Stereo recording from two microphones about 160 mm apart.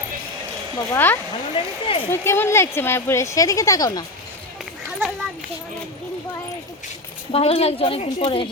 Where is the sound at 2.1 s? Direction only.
15° left (ahead or behind).